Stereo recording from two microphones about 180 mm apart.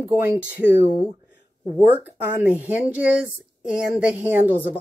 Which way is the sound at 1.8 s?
10° right (ahead or behind).